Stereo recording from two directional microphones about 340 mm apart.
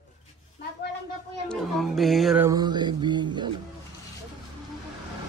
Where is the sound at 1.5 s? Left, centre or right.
Centre.